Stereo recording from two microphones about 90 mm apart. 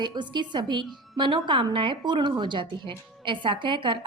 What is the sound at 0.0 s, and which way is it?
A woman's voice, 55° right (ahead or behind).